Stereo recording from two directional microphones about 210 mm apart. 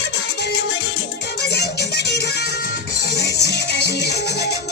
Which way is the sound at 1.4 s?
50° left (ahead or behind).